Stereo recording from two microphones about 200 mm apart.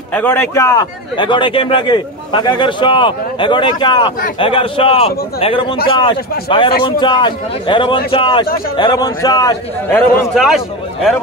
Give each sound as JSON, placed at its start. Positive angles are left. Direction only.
{"t": 0.1, "sound": "speech", "side_deg": 10}
{"t": 10.3, "sound": "a man's voice", "side_deg": 0}